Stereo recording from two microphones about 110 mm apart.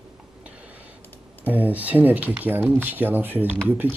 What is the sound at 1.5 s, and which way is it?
Speech, 15° right (ahead or behind).